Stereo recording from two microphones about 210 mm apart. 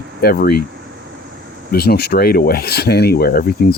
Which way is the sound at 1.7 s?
50° left (ahead or behind).